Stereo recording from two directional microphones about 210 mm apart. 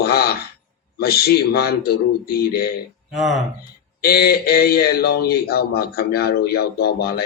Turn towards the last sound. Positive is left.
turn(degrees=50)  # may be behind; listen again after turning